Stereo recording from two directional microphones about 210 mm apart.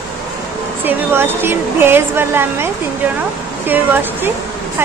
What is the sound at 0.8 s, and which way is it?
A woman's voice, 10° right (ahead or behind).